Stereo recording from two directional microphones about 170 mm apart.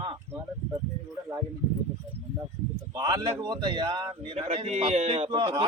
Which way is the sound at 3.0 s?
25° right (ahead or behind).